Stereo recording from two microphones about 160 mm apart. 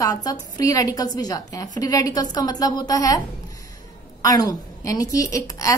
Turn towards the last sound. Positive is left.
turn(degrees=20)  # may be behind; listen again after turning